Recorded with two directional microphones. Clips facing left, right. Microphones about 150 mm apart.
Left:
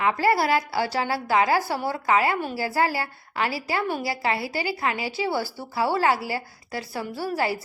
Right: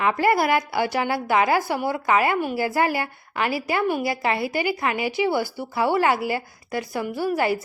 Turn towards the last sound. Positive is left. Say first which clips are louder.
# right 4 dB
turn(degrees=-20)  # may be behind; listen again after turning